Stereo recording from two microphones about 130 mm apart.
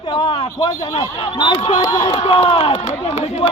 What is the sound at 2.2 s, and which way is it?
Speech, 50° left (ahead or behind).